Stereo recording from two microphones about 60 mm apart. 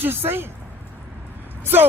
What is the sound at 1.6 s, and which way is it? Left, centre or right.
Speech, right.